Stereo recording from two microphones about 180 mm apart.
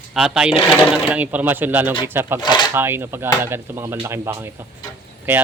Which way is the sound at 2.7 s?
10° right (ahead or behind).